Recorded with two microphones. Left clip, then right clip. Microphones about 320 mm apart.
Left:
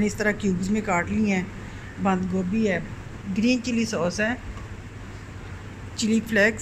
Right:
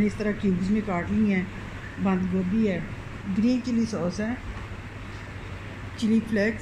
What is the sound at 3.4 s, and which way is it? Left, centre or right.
Speech, left.